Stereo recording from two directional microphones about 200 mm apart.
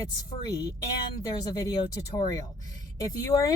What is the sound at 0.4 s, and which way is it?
Speech, 15° left (ahead or behind).